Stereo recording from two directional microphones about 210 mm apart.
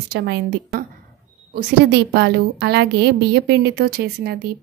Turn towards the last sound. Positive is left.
turn(degrees=-50)  # may be behind; listen again after turning